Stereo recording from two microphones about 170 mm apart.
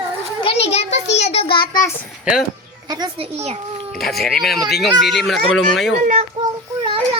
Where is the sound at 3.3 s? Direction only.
35° right (ahead or behind).